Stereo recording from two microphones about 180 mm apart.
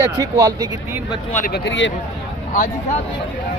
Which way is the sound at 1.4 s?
60° left (ahead or behind).